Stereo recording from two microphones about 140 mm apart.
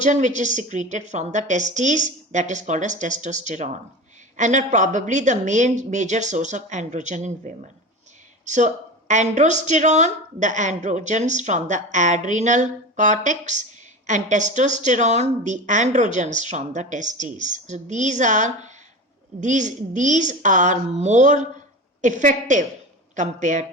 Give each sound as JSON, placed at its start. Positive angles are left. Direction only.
{"t": 0.0, "sound": "a woman's voice", "side_deg": -60}